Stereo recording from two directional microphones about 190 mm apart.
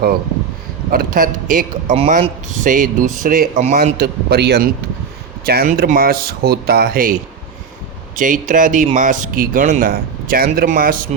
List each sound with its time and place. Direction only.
0.9 s speech: 50° right (ahead or behind)
3.9 s a man's voice: 55° right (ahead or behind)
8.1 s speech: 45° right (ahead or behind)